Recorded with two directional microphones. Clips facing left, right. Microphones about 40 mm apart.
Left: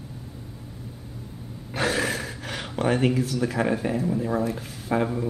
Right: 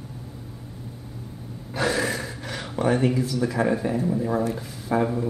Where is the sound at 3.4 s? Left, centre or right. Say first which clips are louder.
Right 4 dB; centre.